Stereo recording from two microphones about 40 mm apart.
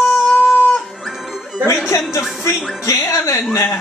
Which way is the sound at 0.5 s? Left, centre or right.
Left.